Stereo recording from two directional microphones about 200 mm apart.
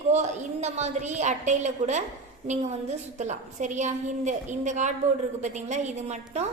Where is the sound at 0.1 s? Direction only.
35° right (ahead or behind).